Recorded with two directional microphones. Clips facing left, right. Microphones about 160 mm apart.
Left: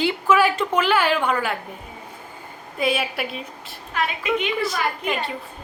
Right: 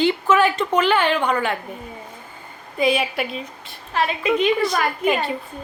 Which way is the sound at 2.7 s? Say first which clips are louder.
Right 3 dB; centre (ahead or behind).